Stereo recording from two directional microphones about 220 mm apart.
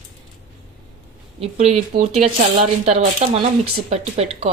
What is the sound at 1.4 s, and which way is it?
A woman's voice, 30° right (ahead or behind).